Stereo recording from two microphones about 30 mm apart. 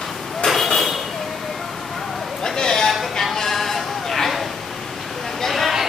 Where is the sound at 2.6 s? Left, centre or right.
Centre.